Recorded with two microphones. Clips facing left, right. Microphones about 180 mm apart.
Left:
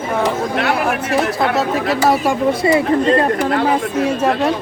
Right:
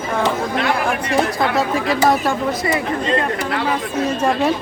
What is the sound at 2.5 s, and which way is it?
Speech, 25° left (ahead or behind).